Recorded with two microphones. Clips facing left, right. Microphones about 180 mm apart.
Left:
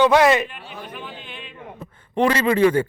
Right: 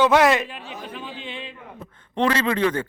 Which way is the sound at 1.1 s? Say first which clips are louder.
Right 4 dB; 90° right.